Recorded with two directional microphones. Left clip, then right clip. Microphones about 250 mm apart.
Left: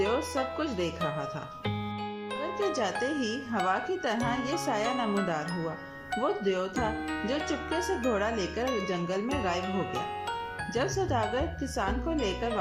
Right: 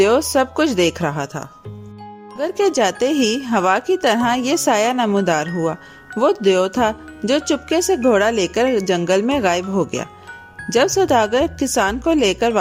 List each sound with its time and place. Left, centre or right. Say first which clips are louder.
0.0 s speech: right 14 dB; right